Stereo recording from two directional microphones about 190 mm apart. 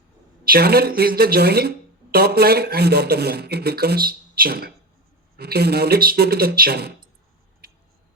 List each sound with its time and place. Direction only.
0.4 s speech: 55° right (ahead or behind)